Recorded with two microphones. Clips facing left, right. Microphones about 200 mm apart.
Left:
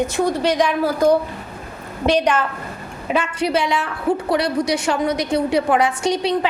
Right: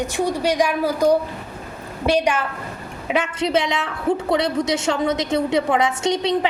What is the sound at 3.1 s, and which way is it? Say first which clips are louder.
A woman's voice: even; 20° right (ahead or behind).